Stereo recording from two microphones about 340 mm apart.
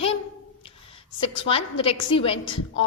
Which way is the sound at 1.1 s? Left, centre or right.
Centre.